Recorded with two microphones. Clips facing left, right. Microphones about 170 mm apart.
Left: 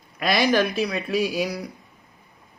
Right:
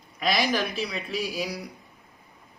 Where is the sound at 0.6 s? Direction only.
Centre (ahead or behind).